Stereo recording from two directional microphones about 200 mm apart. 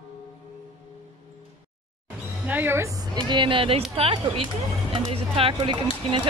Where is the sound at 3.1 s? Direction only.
25° right (ahead or behind).